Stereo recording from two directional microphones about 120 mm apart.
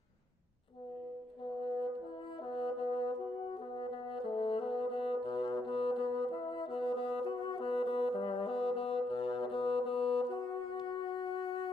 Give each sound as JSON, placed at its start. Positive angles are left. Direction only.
{"t": 2.5, "sound": "brass instrument", "side_deg": 50}
{"t": 10.3, "sound": "music", "side_deg": 40}